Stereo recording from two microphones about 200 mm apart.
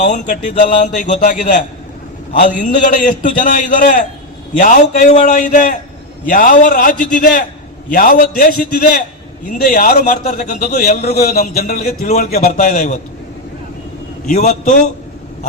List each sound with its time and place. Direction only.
0.0 s a man's voice: 40° left (ahead or behind)
14.3 s a man's voice: 35° left (ahead or behind)